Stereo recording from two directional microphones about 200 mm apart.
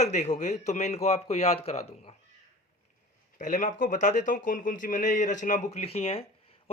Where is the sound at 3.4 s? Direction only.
40° left (ahead or behind).